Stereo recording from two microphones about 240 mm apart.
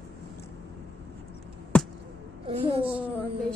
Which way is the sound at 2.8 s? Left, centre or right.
Centre.